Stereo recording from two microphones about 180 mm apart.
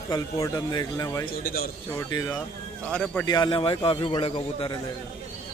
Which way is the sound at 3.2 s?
20° left (ahead or behind).